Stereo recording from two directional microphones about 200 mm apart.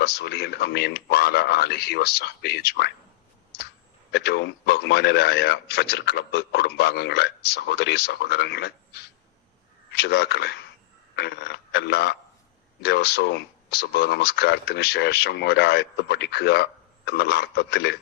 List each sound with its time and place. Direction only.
0.0 s speech: 55° left (ahead or behind)
4.1 s speech: 55° left (ahead or behind)